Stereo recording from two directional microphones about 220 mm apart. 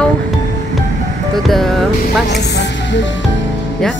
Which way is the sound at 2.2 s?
50° left (ahead or behind).